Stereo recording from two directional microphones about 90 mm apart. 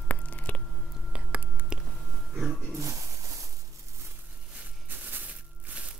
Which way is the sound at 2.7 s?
35° right (ahead or behind).